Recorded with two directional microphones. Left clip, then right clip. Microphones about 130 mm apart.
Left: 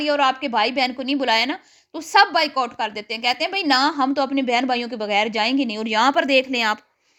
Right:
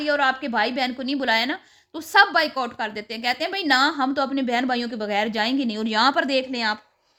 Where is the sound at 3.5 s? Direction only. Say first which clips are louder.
Right 1 dB; 15° left (ahead or behind); by 6.8 s 35° left (ahead or behind).